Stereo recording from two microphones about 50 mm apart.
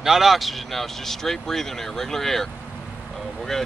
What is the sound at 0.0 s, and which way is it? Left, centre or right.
Speech, centre.